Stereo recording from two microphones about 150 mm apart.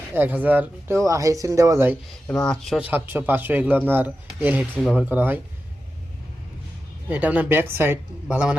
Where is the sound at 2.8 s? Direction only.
15° right (ahead or behind).